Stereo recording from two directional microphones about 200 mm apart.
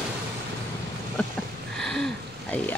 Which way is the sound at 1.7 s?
Centre (ahead or behind).